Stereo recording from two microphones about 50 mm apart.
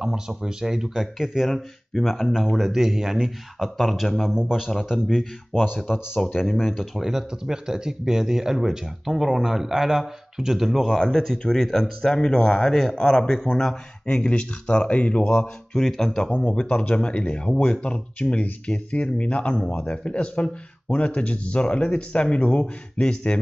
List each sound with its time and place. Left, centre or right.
0.0 s speech: centre
4.9 s speech: centre
5.5 s speech: centre
6.2 s speech: centre
10.9 s speech: centre
14.0 s speech: left
15.7 s speech: centre
16.3 s speech: left